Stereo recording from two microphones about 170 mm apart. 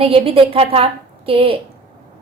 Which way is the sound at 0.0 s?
35° right (ahead or behind).